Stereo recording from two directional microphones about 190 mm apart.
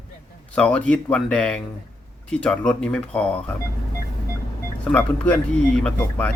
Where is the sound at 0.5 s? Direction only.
5° left (ahead or behind).